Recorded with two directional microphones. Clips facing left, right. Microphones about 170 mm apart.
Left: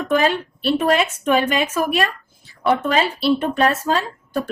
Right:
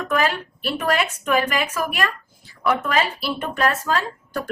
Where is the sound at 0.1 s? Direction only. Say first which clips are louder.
Left 4 dB; 25° left (ahead or behind).